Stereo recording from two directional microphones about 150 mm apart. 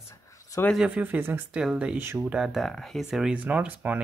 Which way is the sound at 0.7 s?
5° right (ahead or behind).